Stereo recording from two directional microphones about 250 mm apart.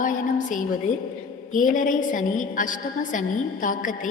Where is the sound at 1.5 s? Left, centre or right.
Left.